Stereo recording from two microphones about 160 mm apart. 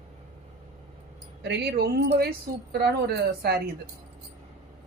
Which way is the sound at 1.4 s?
90° right.